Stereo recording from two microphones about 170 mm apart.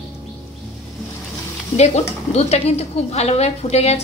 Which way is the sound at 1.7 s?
40° left (ahead or behind).